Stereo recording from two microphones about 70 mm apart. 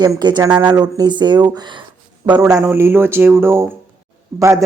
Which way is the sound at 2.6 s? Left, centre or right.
Right.